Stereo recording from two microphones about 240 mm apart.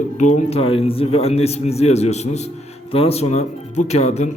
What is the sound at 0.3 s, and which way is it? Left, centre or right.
A man's voice, left.